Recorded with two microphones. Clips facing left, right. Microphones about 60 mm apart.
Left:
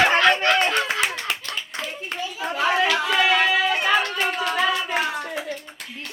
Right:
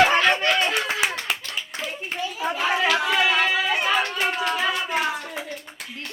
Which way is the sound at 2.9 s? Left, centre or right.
Centre.